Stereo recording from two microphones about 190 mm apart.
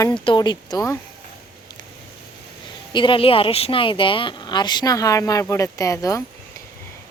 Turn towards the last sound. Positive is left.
turn(degrees=15)  # may be behind; listen again after turning